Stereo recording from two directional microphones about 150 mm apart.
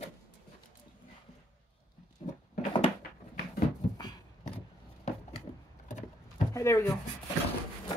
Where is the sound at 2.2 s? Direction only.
45° left (ahead or behind).